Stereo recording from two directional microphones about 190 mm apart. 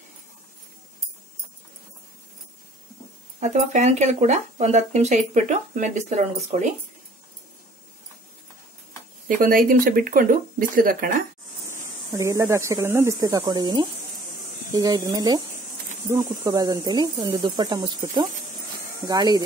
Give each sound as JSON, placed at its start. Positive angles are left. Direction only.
{"t": 3.3, "sound": "speech", "side_deg": -35}
{"t": 9.4, "sound": "speech", "side_deg": -50}
{"t": 12.1, "sound": "speech", "side_deg": -15}